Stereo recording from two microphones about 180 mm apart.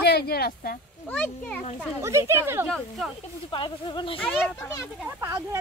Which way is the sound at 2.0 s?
15° right (ahead or behind).